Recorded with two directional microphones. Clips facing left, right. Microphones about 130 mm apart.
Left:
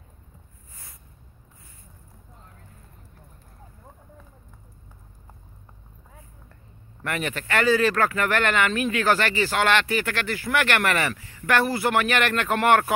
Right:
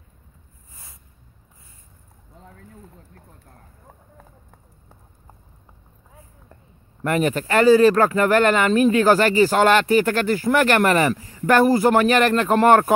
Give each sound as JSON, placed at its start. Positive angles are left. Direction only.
{"t": 7.1, "sound": "speech", "side_deg": -35}